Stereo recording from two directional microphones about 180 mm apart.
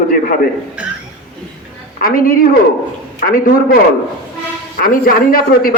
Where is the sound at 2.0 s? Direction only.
55° left (ahead or behind).